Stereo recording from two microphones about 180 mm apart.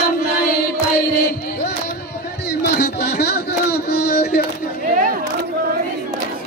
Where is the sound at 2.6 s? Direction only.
60° left (ahead or behind).